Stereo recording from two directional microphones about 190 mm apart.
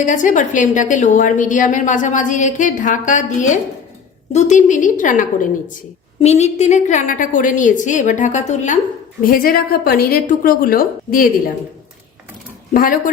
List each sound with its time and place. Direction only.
0.0 s a woman's voice: 40° left (ahead or behind)
12.7 s a woman's voice: 50° left (ahead or behind)